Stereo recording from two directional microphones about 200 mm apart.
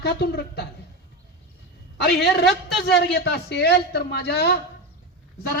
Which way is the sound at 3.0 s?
55° left (ahead or behind).